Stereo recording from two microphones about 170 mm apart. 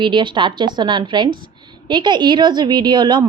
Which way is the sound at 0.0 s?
30° right (ahead or behind).